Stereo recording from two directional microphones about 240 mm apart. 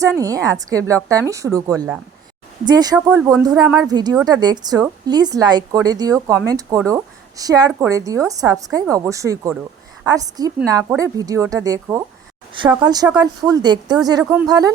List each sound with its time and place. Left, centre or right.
0.2 s a woman's voice: centre